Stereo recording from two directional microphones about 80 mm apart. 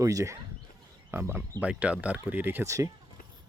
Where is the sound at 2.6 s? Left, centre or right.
Right.